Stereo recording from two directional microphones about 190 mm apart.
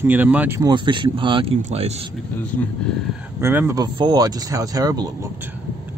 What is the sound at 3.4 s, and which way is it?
Speech, 10° right (ahead or behind).